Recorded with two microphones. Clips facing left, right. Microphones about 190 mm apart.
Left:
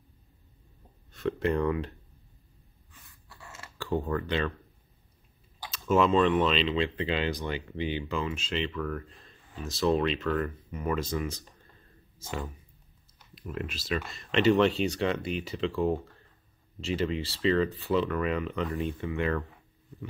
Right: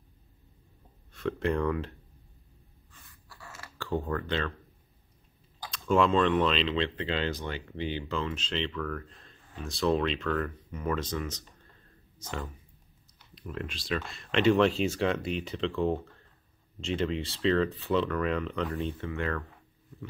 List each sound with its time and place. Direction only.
1.1 s speech: centre (ahead or behind)
3.3 s a sound: 25° left (ahead or behind)
3.7 s speech: 15° left (ahead or behind)
5.7 s speech: 5° left (ahead or behind)
13.3 s speech: 5° left (ahead or behind)
18.9 s speech: 15° left (ahead or behind)